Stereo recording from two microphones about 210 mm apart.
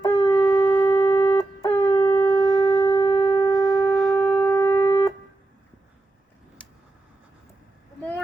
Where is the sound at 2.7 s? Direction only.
20° left (ahead or behind).